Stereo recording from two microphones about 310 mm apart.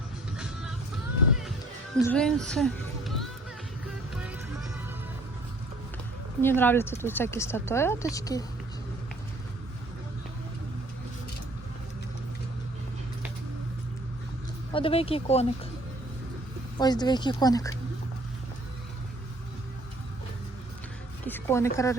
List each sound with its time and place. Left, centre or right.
2.0 s speech: centre
4.1 s music: centre
6.4 s speech: centre
14.7 s speech: centre
16.7 s speech: centre
21.2 s a woman's voice: centre